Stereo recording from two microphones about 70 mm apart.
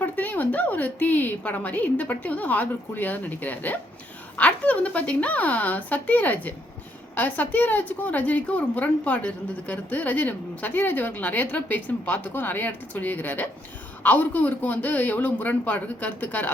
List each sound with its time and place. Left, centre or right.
0.0 s a woman's voice: left